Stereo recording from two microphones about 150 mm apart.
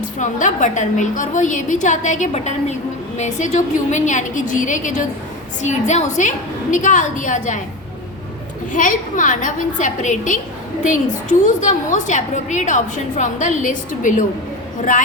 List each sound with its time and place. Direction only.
0.2 s a woman's voice: 55° left (ahead or behind)
8.7 s a woman's voice: 60° left (ahead or behind)